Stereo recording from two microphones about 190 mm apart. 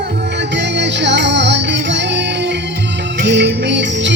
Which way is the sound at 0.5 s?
65° right (ahead or behind).